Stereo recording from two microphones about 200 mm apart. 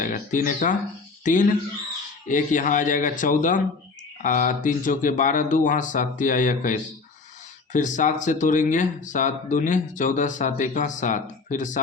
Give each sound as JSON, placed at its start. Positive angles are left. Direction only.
{"t": 0.0, "sound": "speech", "side_deg": 40}